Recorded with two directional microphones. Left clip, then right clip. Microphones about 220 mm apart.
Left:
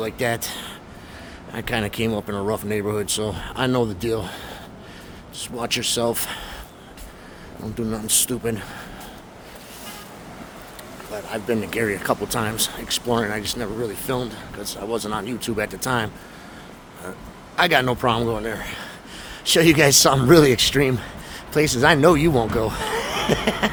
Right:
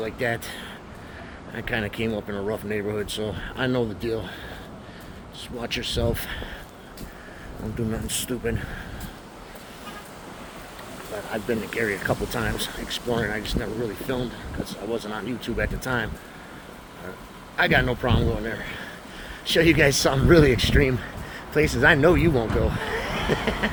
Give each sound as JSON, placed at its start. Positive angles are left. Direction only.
{"t": 0.0, "sound": "speech", "side_deg": 30}
{"t": 5.5, "sound": "a man's voice", "side_deg": 30}
{"t": 7.9, "sound": "speech", "side_deg": 20}
{"t": 11.3, "sound": "a man's voice", "side_deg": 30}
{"t": 17.6, "sound": "a man's voice", "side_deg": 30}